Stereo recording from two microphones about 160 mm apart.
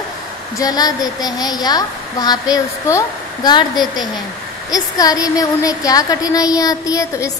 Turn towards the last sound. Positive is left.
turn(degrees=20)  # may be behind; listen again after turning